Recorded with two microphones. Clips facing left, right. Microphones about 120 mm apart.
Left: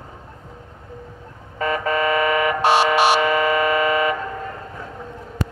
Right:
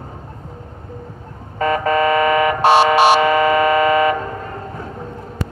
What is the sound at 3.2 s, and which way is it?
Music, centre (ahead or behind).